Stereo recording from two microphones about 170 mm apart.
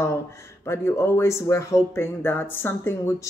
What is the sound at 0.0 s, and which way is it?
Speech, 15° left (ahead or behind).